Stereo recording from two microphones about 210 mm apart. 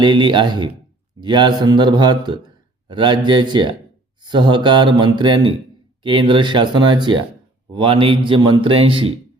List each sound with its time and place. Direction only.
0.0 s a man's voice: 20° right (ahead or behind)